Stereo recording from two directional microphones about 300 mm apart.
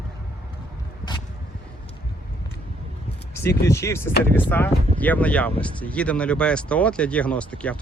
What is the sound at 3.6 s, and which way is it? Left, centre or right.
Speech, centre.